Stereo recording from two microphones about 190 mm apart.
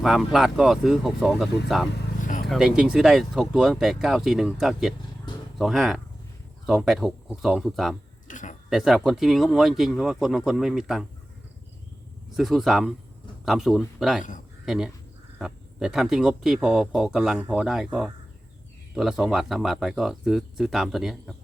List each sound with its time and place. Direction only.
0.0 s speech: centre (ahead or behind)
2.2 s vehicle: 40° left (ahead or behind)
2.5 s speech: 5° right (ahead or behind)
8.3 s a sound: 40° left (ahead or behind)
8.7 s speech: centre (ahead or behind)
12.4 s speech: centre (ahead or behind)